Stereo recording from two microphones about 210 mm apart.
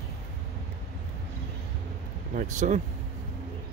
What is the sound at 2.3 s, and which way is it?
Speech, 35° right (ahead or behind).